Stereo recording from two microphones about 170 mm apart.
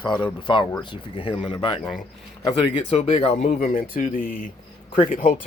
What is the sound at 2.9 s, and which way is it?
Speech, 35° left (ahead or behind).